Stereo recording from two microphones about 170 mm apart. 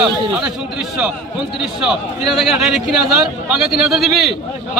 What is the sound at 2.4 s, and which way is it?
Speech, centre (ahead or behind).